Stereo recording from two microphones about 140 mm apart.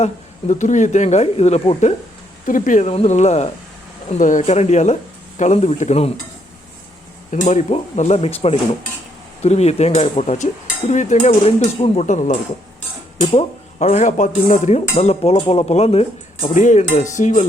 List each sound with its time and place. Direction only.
0.0 s speech: 55° left (ahead or behind)
2.5 s speech: 70° left (ahead or behind)
2.9 s dishes: 55° left (ahead or behind)
4.1 s speech: 65° left (ahead or behind)
5.4 s dishes: 55° left (ahead or behind)
7.4 s dishes: 55° left (ahead or behind)
13.2 s dishes: 50° left (ahead or behind)
16.4 s speech: 65° left (ahead or behind)